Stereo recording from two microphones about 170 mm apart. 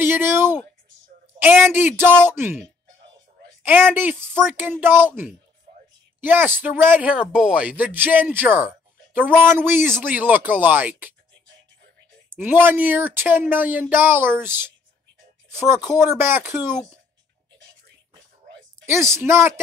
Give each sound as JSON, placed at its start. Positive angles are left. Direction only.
{"t": 0.0, "sound": "a sound", "side_deg": -15}
{"t": 1.4, "sound": "speech", "side_deg": -10}
{"t": 3.6, "sound": "speech", "side_deg": -10}
{"t": 12.4, "sound": "speech", "side_deg": -10}
{"t": 18.9, "sound": "speech", "side_deg": -15}